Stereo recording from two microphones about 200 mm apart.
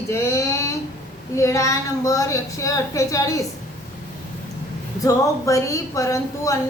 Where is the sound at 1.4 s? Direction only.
15° left (ahead or behind).